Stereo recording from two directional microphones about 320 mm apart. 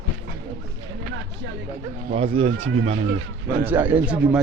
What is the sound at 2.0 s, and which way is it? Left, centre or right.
Speech, centre.